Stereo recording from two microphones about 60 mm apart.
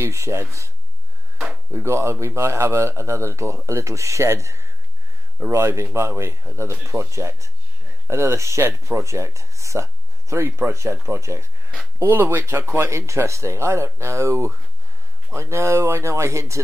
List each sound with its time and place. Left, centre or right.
0.0 s speech: right
1.9 s speech: right
12.0 s speech: right
12.9 s speech: right